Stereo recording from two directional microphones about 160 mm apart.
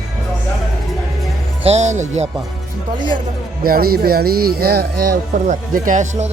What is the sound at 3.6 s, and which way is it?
Speech, 70° right (ahead or behind).